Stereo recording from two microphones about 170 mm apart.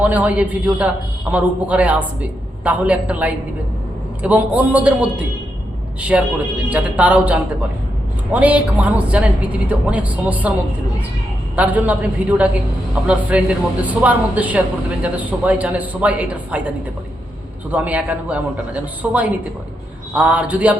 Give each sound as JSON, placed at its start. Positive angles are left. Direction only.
{"t": 0.0, "sound": "a man's voice", "side_deg": -10}
{"t": 11.5, "sound": "a man's voice", "side_deg": -10}
{"t": 17.7, "sound": "a man's voice", "side_deg": -10}